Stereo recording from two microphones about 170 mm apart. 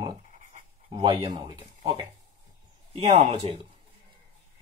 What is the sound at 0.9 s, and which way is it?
Speech, 30° right (ahead or behind).